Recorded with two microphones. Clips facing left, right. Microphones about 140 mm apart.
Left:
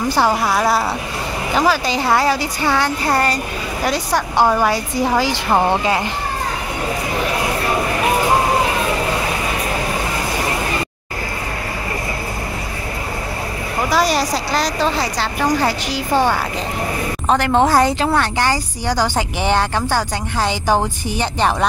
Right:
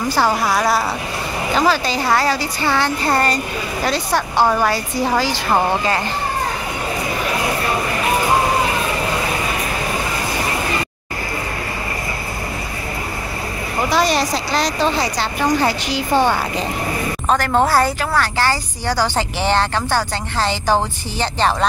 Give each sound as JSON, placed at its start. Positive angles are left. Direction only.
{"t": 0.1, "sound": "speech", "side_deg": 15}
{"t": 0.5, "sound": "a woman's voice", "side_deg": 0}
{"t": 1.5, "sound": "speech", "side_deg": 10}
{"t": 13.8, "sound": "a woman's voice", "side_deg": 5}
{"t": 17.3, "sound": "speech", "side_deg": 20}